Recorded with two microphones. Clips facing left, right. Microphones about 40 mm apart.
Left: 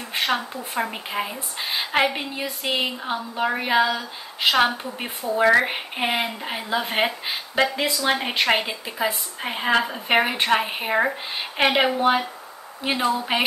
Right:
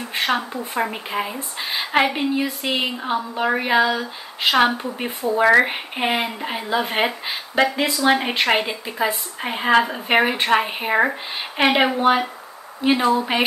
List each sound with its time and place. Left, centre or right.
0.3 s a woman's voice: centre
0.9 s a woman's voice: centre